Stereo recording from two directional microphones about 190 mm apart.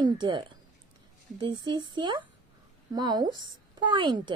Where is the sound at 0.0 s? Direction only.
25° right (ahead or behind).